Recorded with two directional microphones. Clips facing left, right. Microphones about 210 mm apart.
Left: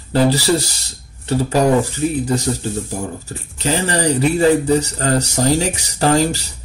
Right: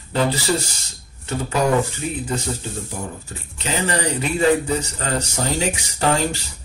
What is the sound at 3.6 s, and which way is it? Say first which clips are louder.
Speech: left 4 dB; 35° left (ahead or behind).